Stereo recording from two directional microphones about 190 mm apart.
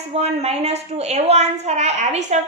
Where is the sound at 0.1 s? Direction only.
35° right (ahead or behind).